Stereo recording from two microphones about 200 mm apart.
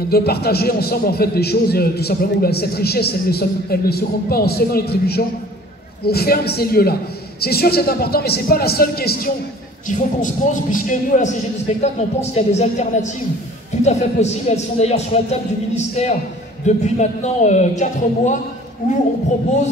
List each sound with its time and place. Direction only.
0.1 s a man's voice: 50° left (ahead or behind)
9.8 s a man's voice: 40° left (ahead or behind)